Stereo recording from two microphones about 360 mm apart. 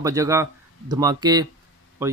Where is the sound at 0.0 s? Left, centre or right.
Centre.